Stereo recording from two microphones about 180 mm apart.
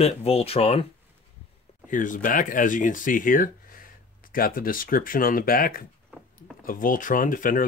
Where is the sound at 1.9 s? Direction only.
45° left (ahead or behind).